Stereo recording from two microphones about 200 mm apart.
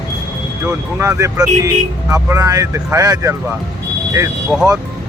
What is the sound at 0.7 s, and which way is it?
Speech, 15° right (ahead or behind).